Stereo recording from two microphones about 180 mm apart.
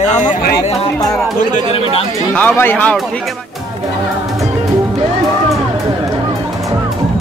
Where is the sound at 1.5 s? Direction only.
35° left (ahead or behind).